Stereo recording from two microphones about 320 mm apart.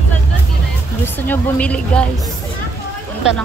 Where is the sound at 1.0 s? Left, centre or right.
Centre.